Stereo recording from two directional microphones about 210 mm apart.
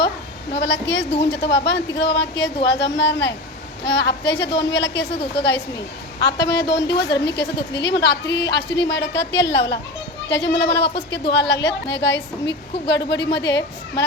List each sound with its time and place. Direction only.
0.5 s a woman's voice: 55° left (ahead or behind)